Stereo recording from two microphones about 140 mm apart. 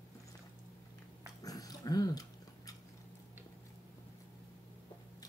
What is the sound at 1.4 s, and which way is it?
Dog, 25° left (ahead or behind).